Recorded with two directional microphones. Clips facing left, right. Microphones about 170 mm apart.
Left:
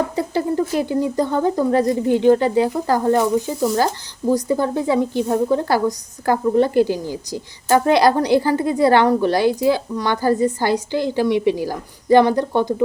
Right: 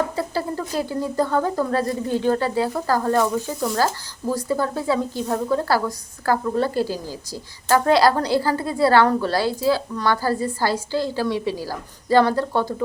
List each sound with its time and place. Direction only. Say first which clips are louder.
0.2 s a woman's voice: left 5 dB; 20° left (ahead or behind)